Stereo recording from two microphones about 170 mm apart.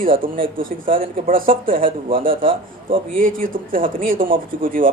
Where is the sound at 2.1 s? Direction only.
30° right (ahead or behind).